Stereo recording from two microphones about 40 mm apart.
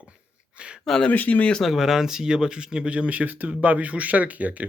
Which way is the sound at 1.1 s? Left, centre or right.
Left.